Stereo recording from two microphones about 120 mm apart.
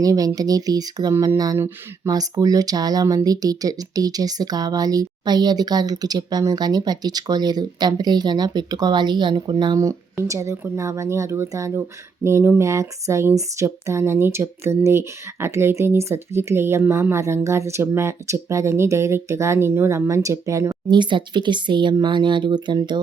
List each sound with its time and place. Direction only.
0.0 s speech: 30° right (ahead or behind)
1.1 s speech: 20° right (ahead or behind)
2.0 s speech: 30° right (ahead or behind)
20.9 s speech: 40° right (ahead or behind)